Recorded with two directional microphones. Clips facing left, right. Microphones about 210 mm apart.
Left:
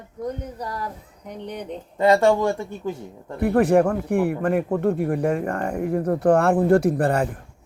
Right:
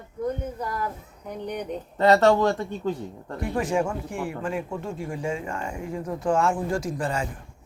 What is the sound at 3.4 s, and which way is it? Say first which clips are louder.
Speech: left 8 dB; 60° left (ahead or behind).